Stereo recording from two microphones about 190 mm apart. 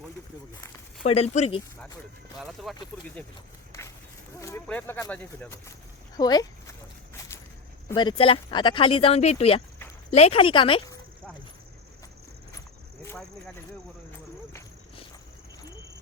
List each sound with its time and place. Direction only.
1.0 s speech: 35° left (ahead or behind)
2.4 s speech: centre (ahead or behind)
4.4 s speech: 15° left (ahead or behind)
6.1 s walk: 20° left (ahead or behind)
7.9 s speech: 25° left (ahead or behind)